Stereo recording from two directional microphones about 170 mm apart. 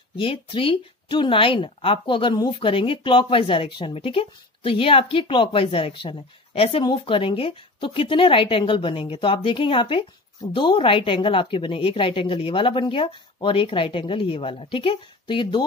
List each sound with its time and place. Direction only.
0.2 s speech: 30° left (ahead or behind)